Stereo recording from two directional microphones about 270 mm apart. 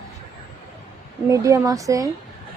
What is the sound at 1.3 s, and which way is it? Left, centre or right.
Speech, centre.